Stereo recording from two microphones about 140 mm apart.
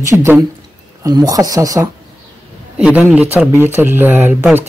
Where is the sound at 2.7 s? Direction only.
5° right (ahead or behind).